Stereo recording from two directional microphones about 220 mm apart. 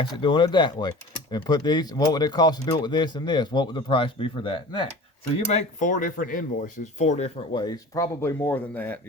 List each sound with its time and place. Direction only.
0.0 s speech: 20° left (ahead or behind)